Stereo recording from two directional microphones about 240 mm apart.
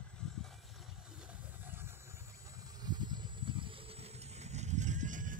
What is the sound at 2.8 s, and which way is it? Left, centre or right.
Vehicle, centre.